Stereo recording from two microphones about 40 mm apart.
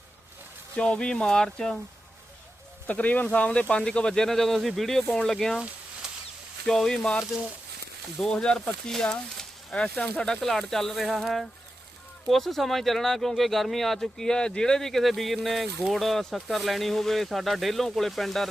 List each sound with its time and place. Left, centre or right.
0.8 s speech: left
2.8 s speech: left
3.8 s speech: centre
6.0 s a sound: centre
6.7 s speech: centre
8.2 s speech: centre
9.7 s speech: left
10.4 s speech: centre
12.3 s speech: centre
14.3 s speech: left; by 18.4 s centre